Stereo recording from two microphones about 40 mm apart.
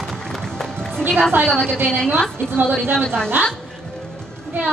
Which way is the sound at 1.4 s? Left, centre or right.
Centre.